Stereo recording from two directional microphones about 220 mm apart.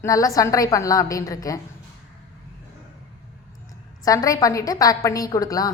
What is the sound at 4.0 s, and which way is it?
A woman's voice, 15° left (ahead or behind).